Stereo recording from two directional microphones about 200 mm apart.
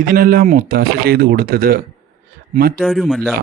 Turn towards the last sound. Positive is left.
turn(degrees=0)  # may be behind; listen again after turning